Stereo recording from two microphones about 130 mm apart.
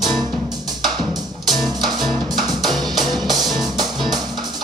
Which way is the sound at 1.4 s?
Centre (ahead or behind).